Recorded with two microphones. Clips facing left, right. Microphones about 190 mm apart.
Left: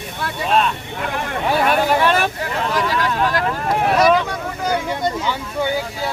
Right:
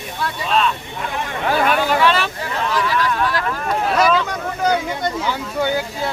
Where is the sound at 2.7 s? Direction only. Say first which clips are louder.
Right 1 dB; 40° left (ahead or behind).